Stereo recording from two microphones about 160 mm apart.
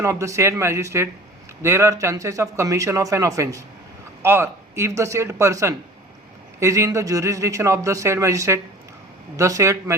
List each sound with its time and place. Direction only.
0.0 s a man's voice: 20° right (ahead or behind)